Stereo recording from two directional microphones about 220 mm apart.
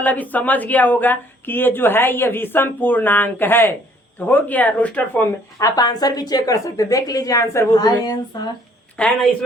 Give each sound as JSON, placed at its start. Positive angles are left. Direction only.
{"t": 0.0, "sound": "speech", "side_deg": 5}
{"t": 9.0, "sound": "a woman's voice", "side_deg": 5}